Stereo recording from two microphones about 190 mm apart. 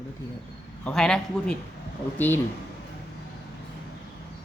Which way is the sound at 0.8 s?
5° left (ahead or behind).